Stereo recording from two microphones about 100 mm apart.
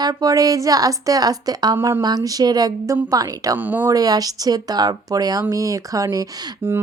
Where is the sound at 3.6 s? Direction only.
20° right (ahead or behind).